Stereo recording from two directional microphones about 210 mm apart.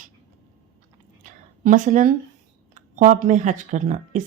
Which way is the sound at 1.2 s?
40° right (ahead or behind).